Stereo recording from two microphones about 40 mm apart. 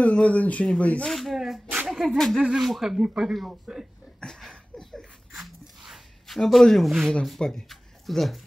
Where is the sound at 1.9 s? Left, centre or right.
Centre.